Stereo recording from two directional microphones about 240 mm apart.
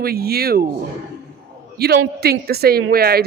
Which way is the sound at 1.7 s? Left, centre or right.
Right.